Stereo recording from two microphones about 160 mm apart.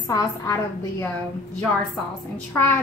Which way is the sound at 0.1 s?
20° left (ahead or behind).